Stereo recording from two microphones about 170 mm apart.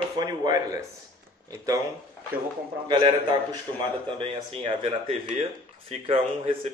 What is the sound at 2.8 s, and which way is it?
A man's voice, 30° right (ahead or behind).